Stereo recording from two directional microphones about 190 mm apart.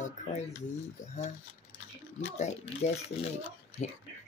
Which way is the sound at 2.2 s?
35° left (ahead or behind).